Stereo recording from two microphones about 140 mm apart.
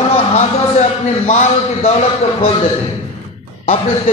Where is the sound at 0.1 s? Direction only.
55° left (ahead or behind).